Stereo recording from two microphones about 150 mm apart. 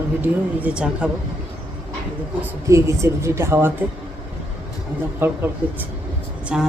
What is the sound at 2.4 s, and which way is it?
Speech, 20° right (ahead or behind).